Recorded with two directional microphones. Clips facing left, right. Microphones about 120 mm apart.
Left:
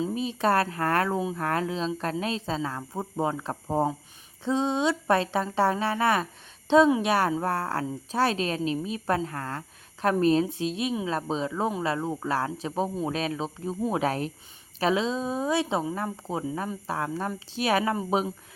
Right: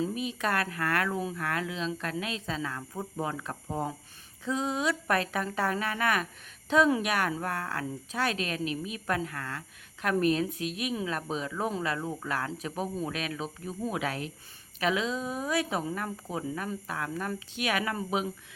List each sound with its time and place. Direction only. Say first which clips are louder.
0.0 s a woman's voice: left 4 dB; 30° left (ahead or behind)